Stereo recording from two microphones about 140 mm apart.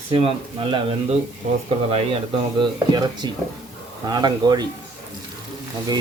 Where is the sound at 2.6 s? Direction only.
30° right (ahead or behind).